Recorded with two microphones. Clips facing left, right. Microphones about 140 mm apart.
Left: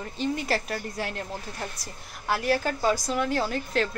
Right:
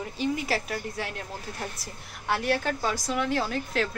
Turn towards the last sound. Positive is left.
turn(degrees=0)  # may be behind; listen again after turning